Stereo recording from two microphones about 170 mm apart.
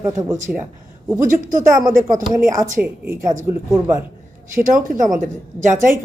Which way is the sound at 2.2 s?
20° right (ahead or behind).